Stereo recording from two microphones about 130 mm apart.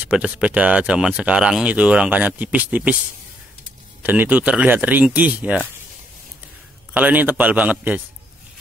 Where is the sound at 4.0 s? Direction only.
15° right (ahead or behind).